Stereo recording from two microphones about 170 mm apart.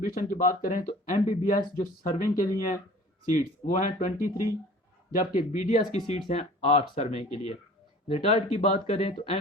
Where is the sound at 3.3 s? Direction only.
45° left (ahead or behind).